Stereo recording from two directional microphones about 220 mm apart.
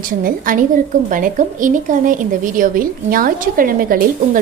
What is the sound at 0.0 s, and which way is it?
A woman's voice, 40° right (ahead or behind).